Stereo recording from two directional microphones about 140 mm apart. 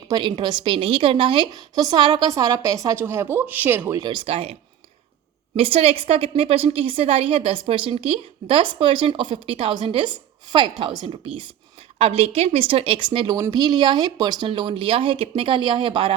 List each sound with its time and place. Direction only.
0.1 s a woman's voice: 35° right (ahead or behind); by 4.0 s 15° right (ahead or behind)
4.0 s a woman's voice: 35° right (ahead or behind)
5.5 s a woman's voice: 40° right (ahead or behind)